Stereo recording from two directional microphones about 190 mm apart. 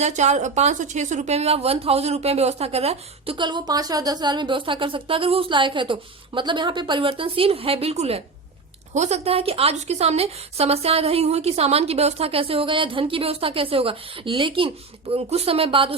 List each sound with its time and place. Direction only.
0.0 s a woman's voice: 35° right (ahead or behind)